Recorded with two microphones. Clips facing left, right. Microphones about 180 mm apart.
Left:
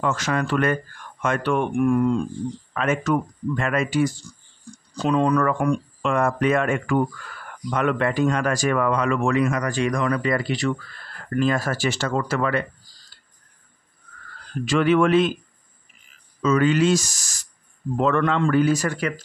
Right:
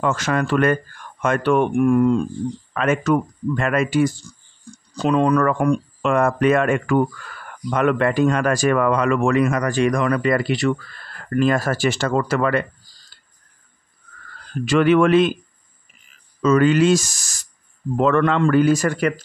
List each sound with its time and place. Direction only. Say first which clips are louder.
0.0 s speech: right 3 dB; 55° right (ahead or behind)
2.8 s speech: right 3 dB; 65° right (ahead or behind)
11.3 s speech: right 3 dB; 55° right (ahead or behind)
14.6 s speech: right 3 dB; 65° right (ahead or behind)
16.4 s speech: right 4 dB; 50° right (ahead or behind)
17.9 s speech: right 3 dB; 65° right (ahead or behind)